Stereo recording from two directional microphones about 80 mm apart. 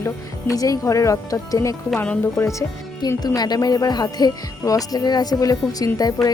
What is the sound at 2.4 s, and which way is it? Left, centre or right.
Speech, left.